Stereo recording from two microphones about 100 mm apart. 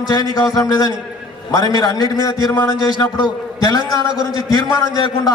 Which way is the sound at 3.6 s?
40° left (ahead or behind).